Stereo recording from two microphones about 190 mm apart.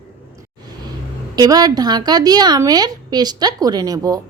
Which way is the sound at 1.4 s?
20° right (ahead or behind).